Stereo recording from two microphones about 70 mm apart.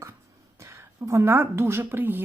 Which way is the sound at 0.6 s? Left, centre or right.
Right.